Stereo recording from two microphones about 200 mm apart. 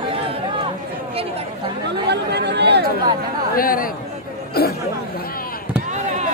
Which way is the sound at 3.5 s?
45° left (ahead or behind).